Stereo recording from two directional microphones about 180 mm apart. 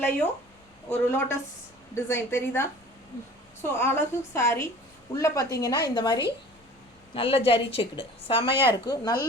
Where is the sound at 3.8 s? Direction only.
15° left (ahead or behind).